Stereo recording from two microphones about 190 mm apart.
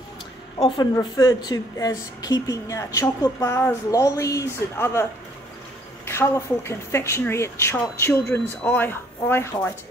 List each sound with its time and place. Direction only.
0.9 s speech: 20° left (ahead or behind)
6.0 s speech: 15° left (ahead or behind)